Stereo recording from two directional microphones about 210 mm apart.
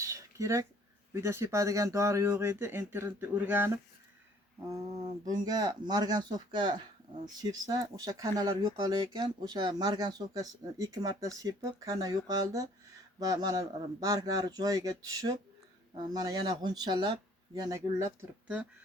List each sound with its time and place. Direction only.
0.0 s a sound: 15° right (ahead or behind)
1.1 s speech: 15° right (ahead or behind)
5.2 s speech: 20° right (ahead or behind)